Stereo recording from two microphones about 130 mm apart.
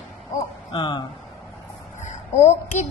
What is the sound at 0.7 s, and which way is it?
Speech, 35° left (ahead or behind).